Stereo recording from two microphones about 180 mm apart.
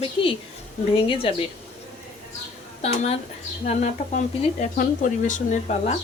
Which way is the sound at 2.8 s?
35° left (ahead or behind).